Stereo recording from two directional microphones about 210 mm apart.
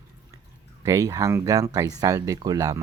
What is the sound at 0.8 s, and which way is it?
Speech, 15° right (ahead or behind).